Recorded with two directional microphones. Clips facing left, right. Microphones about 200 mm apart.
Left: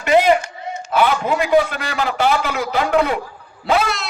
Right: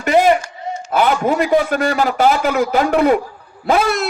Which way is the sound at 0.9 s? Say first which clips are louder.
Right 2 dB; 45° right (ahead or behind).